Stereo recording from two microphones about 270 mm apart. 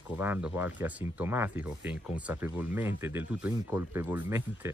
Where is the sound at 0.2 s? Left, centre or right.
Centre.